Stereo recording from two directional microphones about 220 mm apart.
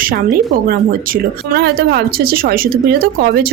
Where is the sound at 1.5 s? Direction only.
45° right (ahead or behind).